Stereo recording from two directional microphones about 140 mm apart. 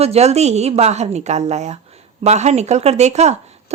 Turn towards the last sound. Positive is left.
turn(degrees=-50)  # may be behind; listen again after turning